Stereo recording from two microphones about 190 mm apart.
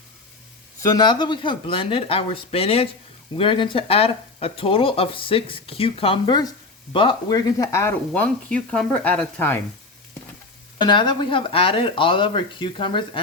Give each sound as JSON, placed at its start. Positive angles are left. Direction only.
{"t": 0.8, "sound": "speech", "side_deg": 20}
{"t": 10.8, "sound": "speech", "side_deg": 25}